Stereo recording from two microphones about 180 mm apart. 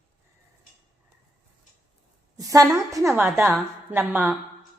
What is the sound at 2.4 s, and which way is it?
A woman's voice, 20° right (ahead or behind).